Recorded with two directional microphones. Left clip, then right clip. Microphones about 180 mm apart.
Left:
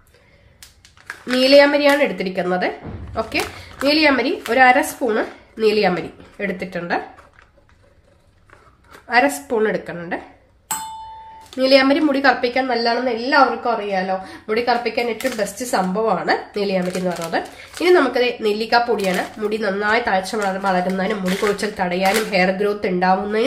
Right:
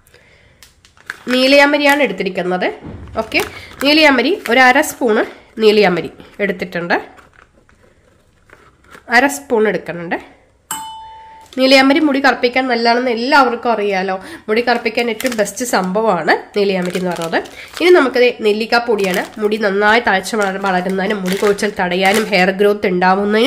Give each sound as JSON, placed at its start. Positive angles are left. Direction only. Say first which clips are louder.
{"t": 1.0, "sound": "a woman's voice", "louder": "right 3 dB", "side_deg": -30}
{"t": 9.0, "sound": "a woman's voice", "louder": "right 4 dB", "side_deg": -40}
{"t": 11.5, "sound": "a woman's voice", "louder": "right 4 dB", "side_deg": -40}